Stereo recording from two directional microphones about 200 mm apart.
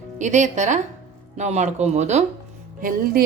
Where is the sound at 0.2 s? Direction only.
35° right (ahead or behind).